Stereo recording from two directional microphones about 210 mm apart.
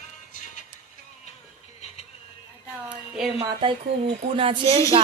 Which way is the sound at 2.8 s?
5° right (ahead or behind).